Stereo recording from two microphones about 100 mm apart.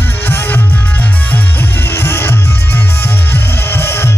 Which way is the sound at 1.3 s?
20° left (ahead or behind).